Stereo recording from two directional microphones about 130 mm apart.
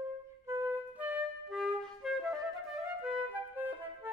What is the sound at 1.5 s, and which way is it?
Music, centre (ahead or behind).